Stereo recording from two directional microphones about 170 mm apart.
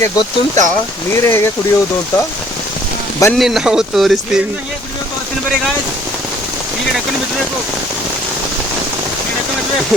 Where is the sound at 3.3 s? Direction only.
Centre (ahead or behind).